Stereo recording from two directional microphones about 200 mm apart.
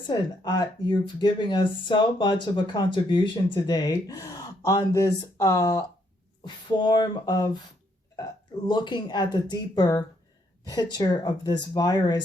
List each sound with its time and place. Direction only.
0.1 s speech: 20° left (ahead or behind)